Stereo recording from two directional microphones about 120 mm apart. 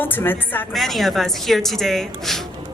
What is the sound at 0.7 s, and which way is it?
A woman's voice, centre (ahead or behind).